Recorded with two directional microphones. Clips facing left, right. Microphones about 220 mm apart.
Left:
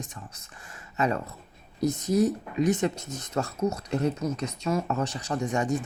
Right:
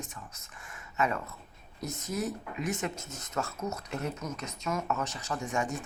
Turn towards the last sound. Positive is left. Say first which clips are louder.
# left 6 dB
turn(degrees=35)  # may be behind; listen again after turning